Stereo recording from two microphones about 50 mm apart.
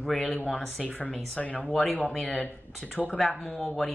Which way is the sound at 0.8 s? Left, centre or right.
Left.